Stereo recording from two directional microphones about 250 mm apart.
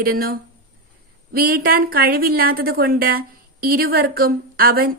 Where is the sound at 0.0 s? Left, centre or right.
Right.